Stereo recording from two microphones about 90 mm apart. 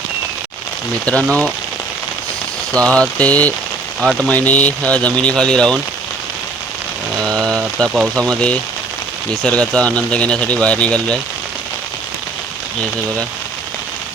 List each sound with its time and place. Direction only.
1.0 s speech: 15° left (ahead or behind)
2.7 s speech: 15° left (ahead or behind)
7.2 s a sound: 5° left (ahead or behind)
7.9 s speech: 5° left (ahead or behind)